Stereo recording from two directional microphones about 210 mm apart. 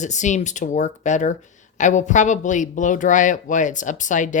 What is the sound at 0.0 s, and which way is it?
Speech, 35° left (ahead or behind).